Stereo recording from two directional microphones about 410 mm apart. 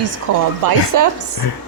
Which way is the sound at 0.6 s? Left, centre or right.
Right.